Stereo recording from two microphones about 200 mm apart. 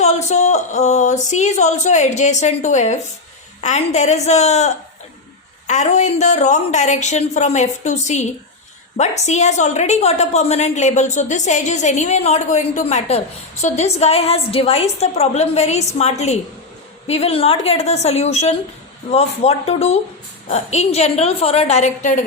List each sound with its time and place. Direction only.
0.0 s a woman's voice: 35° left (ahead or behind)